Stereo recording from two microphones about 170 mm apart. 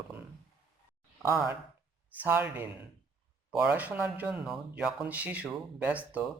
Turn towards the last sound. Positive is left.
turn(degrees=-10)  # may be behind; listen again after turning